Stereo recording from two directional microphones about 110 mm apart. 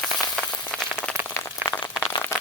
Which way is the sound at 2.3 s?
25° left (ahead or behind).